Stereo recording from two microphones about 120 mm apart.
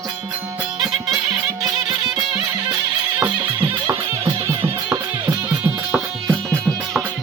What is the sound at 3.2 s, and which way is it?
Music, 20° right (ahead or behind).